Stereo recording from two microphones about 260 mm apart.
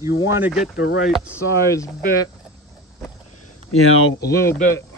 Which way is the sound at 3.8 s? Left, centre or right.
Left.